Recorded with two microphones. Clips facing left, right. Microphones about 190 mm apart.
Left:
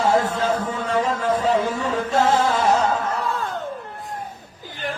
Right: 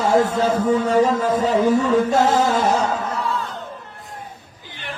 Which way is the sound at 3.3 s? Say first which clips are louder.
Even; 50° left (ahead or behind).